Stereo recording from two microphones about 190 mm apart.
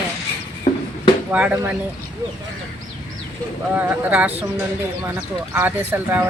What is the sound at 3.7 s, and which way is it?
Speech, 5° right (ahead or behind).